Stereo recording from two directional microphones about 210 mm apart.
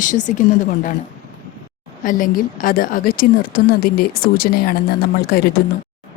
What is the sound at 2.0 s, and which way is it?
A woman's voice, 40° left (ahead or behind).